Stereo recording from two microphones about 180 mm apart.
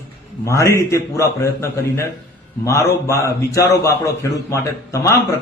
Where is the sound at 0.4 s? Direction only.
15° left (ahead or behind).